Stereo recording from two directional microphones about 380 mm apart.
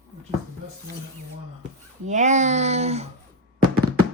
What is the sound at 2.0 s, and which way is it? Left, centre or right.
A child's voice, centre.